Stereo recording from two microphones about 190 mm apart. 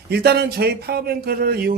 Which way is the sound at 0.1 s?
55° right (ahead or behind).